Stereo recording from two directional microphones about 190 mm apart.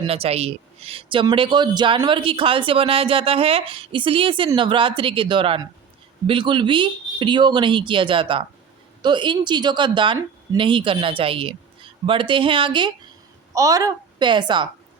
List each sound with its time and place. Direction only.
0.0 s a woman's voice: 30° right (ahead or behind)